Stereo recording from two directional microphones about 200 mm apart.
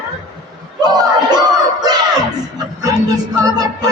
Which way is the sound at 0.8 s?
20° right (ahead or behind).